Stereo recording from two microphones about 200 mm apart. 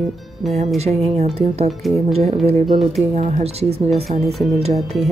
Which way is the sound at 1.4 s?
30° right (ahead or behind).